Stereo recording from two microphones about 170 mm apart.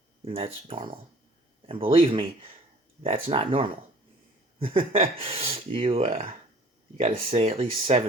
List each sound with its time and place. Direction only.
0.3 s speech: 35° right (ahead or behind)